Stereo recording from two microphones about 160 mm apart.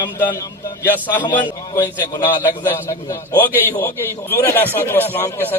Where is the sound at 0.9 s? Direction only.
10° left (ahead or behind).